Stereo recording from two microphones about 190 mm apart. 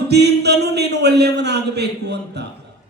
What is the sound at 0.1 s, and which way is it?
Speech, 60° right (ahead or behind).